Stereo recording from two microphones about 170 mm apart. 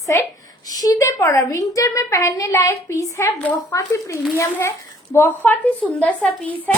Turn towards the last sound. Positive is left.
turn(degrees=5)  # may be behind; listen again after turning